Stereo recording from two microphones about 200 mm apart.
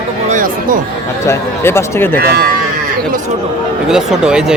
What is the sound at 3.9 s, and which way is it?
Speech, 5° right (ahead or behind).